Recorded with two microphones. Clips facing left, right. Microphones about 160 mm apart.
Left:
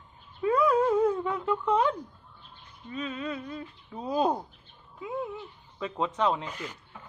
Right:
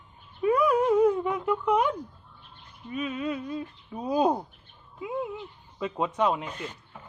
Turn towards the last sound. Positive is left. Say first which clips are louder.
# right 1 dB
turn(degrees=-10)  # may be behind; listen again after turning